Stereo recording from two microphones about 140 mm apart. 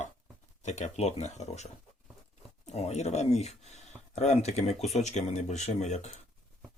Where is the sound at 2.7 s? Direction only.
50° left (ahead or behind).